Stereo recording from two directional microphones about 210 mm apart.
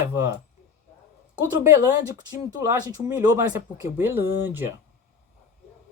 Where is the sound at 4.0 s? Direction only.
10° right (ahead or behind).